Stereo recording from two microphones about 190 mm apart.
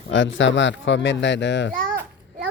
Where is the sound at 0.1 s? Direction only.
75° left (ahead or behind).